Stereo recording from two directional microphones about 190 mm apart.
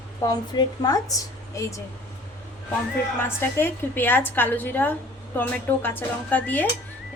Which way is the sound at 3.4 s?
10° left (ahead or behind).